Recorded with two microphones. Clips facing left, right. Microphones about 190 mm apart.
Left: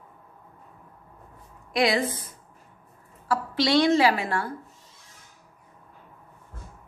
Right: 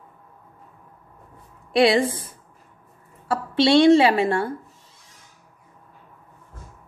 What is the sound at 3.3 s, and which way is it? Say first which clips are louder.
A woman's voice: right 5 dB; 25° right (ahead or behind).